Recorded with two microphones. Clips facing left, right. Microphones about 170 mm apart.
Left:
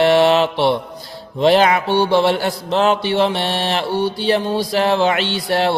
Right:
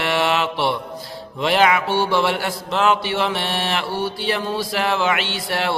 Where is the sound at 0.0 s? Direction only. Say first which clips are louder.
Left 8 dB; 35° left (ahead or behind).